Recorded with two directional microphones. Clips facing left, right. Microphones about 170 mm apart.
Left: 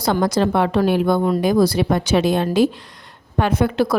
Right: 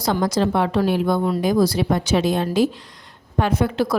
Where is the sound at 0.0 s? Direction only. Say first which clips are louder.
Left 2 dB; 60° left (ahead or behind).